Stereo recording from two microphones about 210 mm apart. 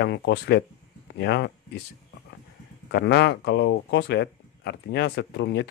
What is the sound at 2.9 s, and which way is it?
Speech, 55° left (ahead or behind).